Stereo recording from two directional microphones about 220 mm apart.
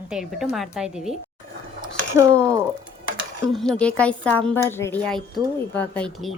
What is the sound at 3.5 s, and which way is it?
A woman's voice, 5° left (ahead or behind).